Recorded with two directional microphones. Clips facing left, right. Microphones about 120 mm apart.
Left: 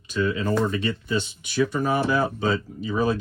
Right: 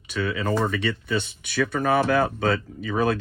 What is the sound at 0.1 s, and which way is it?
Speech, 75° right (ahead or behind).